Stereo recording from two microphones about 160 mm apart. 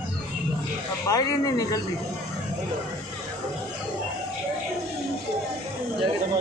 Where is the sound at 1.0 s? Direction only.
20° left (ahead or behind).